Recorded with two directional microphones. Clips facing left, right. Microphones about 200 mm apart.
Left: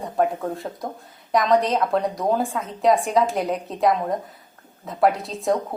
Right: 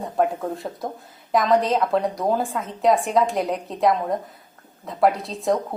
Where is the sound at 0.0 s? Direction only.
Centre (ahead or behind).